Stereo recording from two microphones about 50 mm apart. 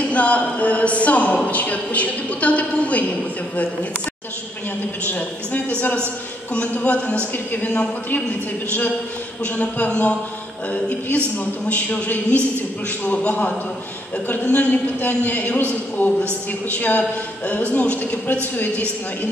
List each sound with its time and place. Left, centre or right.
0.1 s speech: left
5.0 s a man's voice: left
9.4 s a man's voice: left